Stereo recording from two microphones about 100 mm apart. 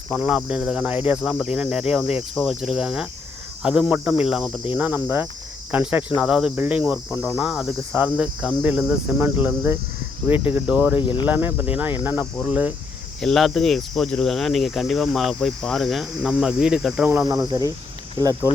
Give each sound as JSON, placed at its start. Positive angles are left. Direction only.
{"t": 0.2, "sound": "cricket", "side_deg": -10}
{"t": 1.2, "sound": "cricket", "side_deg": -5}
{"t": 4.7, "sound": "cricket", "side_deg": -20}
{"t": 11.0, "sound": "speech", "side_deg": 55}
{"t": 11.3, "sound": "cricket", "side_deg": -20}
{"t": 13.1, "sound": "cricket", "side_deg": 5}
{"t": 17.2, "sound": "speech", "side_deg": -35}